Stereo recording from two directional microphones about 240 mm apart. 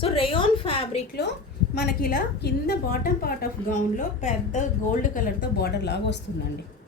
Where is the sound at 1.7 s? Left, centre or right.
Left.